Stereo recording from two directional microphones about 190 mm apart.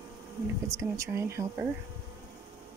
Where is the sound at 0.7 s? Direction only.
15° right (ahead or behind).